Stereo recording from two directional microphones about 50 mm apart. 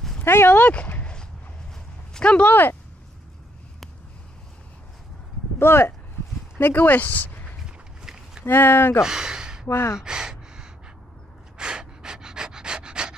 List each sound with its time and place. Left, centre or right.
0.2 s speech: left
2.1 s a sound: left
2.4 s speech: left
5.6 s speech: left
6.6 s speech: left
7.6 s walk: centre
8.5 s speech: left
9.0 s speech: centre
9.7 s speech: left
9.9 s gasp: centre
11.5 s pant: centre